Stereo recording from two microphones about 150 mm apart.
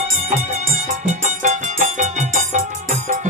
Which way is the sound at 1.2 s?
55° right (ahead or behind).